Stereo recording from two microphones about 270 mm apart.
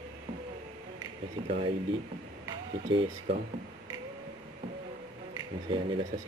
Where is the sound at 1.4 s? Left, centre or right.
Right.